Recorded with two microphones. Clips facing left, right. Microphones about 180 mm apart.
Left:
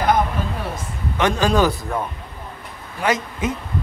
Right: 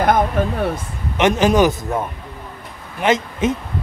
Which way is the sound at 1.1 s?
20° right (ahead or behind).